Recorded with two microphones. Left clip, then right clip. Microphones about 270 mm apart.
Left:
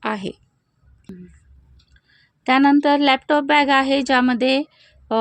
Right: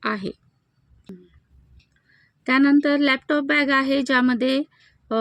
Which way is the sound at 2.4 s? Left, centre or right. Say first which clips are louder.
Left 3 dB; centre.